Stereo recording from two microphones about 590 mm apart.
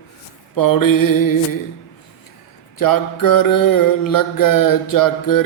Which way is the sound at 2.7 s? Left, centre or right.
Left.